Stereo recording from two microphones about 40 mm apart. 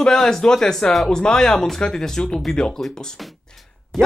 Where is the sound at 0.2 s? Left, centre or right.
Centre.